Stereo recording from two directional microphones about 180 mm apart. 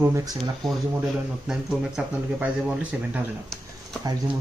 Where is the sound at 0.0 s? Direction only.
20° right (ahead or behind).